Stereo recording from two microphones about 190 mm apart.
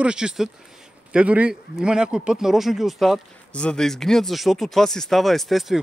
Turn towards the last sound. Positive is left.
turn(degrees=0)  # may be behind; listen again after turning